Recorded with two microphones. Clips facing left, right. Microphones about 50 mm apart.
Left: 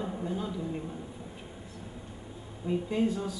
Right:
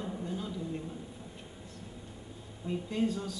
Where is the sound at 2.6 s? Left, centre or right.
Centre.